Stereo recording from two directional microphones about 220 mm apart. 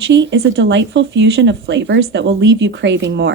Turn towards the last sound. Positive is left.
turn(degrees=-55)  # may be behind; listen again after turning